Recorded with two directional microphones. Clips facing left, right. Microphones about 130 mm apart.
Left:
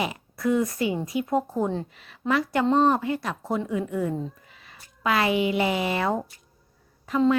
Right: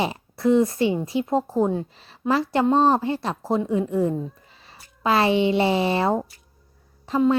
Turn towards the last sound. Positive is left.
turn(degrees=-30)  # may be behind; listen again after turning